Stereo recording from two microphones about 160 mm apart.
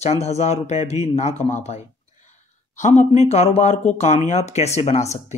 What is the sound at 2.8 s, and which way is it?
Speech, 45° left (ahead or behind).